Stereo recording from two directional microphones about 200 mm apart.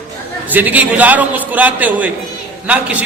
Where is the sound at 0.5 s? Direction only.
10° right (ahead or behind).